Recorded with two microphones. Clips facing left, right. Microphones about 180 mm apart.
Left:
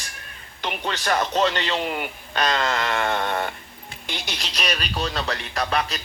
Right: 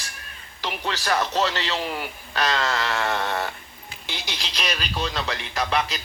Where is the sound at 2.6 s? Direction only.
15° left (ahead or behind).